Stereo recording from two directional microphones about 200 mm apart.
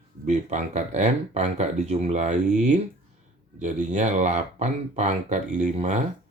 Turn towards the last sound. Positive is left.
turn(degrees=-35)  # may be behind; listen again after turning